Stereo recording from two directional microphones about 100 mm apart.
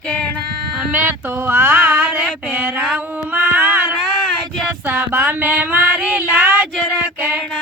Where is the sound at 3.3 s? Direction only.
15° right (ahead or behind).